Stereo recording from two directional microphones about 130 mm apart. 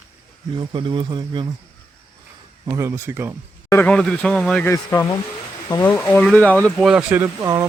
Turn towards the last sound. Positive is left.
turn(degrees=-25)  # may be behind; listen again after turning